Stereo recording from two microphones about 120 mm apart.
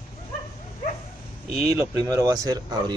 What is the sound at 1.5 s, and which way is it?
Speech, 55° left (ahead or behind).